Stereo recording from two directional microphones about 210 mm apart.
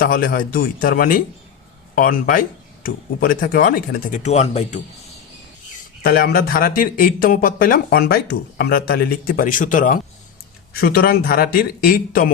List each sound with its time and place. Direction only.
0.0 s speech: 45° left (ahead or behind)
6.0 s speech: 45° left (ahead or behind)